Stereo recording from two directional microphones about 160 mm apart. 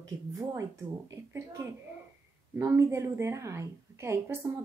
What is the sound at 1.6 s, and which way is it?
A woman's voice, 20° right (ahead or behind).